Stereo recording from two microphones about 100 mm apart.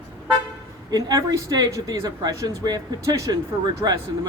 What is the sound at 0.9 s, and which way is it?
Speech, 40° right (ahead or behind).